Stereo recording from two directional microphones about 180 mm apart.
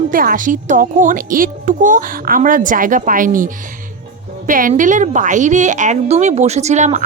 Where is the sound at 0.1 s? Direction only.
50° right (ahead or behind).